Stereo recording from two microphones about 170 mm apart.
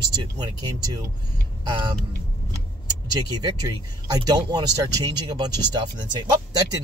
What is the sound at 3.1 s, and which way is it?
Speech, 25° right (ahead or behind).